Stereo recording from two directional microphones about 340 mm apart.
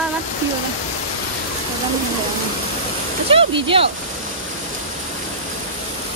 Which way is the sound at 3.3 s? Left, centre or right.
Centre.